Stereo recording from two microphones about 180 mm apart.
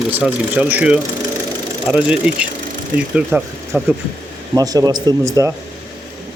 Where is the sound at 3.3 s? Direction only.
10° right (ahead or behind).